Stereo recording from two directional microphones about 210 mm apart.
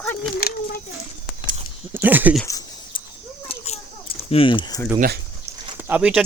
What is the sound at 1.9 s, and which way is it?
Speech, 10° right (ahead or behind).